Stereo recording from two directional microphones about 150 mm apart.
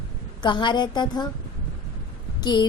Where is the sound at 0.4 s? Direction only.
30° left (ahead or behind).